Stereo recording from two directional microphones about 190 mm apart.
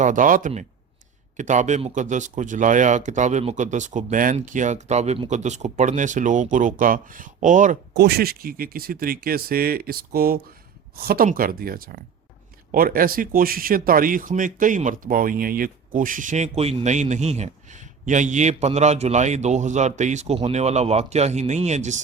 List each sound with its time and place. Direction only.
0.0 s speech: 45° right (ahead or behind)
7.9 s speech: 55° right (ahead or behind); by 22.0 s 40° right (ahead or behind)